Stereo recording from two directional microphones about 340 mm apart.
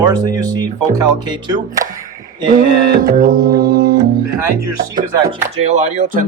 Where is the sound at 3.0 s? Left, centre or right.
Right.